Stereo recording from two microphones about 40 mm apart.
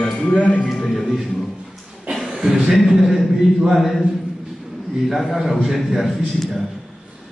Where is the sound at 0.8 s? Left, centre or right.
Centre.